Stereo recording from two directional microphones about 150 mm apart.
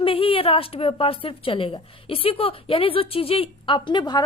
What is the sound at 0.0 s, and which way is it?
A woman's voice, 35° left (ahead or behind).